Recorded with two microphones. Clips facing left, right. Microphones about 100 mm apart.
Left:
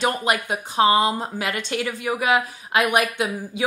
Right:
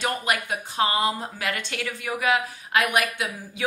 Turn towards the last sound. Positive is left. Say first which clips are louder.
# left 6 dB
turn(degrees=20)  # may be behind; listen again after turning